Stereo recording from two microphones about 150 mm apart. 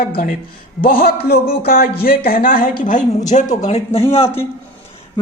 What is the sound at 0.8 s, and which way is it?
Speech, 80° left.